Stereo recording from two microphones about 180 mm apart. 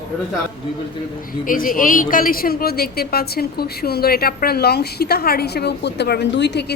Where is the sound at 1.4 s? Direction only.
50° left (ahead or behind).